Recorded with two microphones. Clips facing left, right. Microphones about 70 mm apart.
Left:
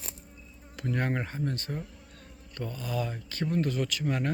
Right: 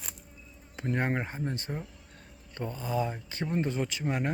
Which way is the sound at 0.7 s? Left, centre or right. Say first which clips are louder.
Right 1 dB; right.